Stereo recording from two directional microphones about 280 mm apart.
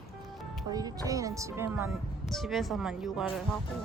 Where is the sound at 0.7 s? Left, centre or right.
Centre.